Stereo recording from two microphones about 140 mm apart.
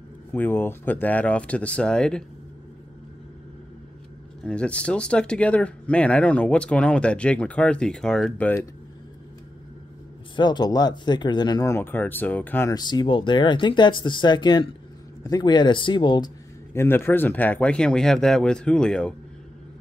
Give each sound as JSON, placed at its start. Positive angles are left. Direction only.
{"t": 0.3, "sound": "speech", "side_deg": 15}
{"t": 4.4, "sound": "speech", "side_deg": 5}
{"t": 10.3, "sound": "speech", "side_deg": 30}
{"t": 12.7, "sound": "speech", "side_deg": 30}
{"t": 16.7, "sound": "speech", "side_deg": 15}